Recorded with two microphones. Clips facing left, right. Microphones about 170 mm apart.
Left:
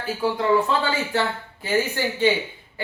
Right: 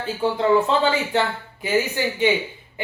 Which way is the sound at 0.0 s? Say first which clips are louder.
Right 2 dB; 25° right (ahead or behind).